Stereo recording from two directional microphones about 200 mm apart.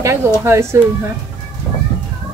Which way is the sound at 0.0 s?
15° right (ahead or behind).